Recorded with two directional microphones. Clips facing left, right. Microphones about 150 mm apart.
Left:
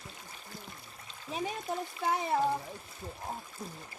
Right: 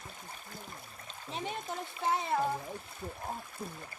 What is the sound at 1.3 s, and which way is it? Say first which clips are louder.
Speech: left 3 dB; 5° left (ahead or behind).